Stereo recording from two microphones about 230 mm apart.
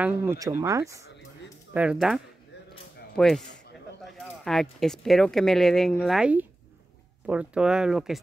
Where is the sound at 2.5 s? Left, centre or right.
Left.